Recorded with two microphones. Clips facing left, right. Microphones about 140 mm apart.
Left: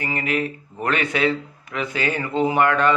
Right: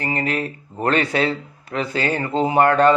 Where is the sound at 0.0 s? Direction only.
35° right (ahead or behind).